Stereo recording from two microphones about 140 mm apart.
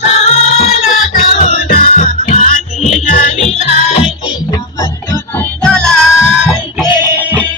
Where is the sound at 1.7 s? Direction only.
75° left (ahead or behind); by 4.1 s 50° left (ahead or behind).